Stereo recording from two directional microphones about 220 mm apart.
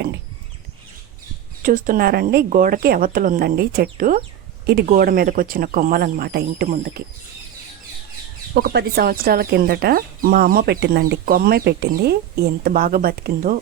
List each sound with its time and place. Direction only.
1.6 s a woman's voice: 40° right (ahead or behind)
8.5 s speech: 45° right (ahead or behind)